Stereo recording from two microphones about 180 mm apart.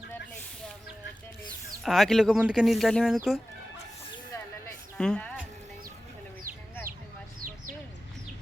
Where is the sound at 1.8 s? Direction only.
Centre (ahead or behind).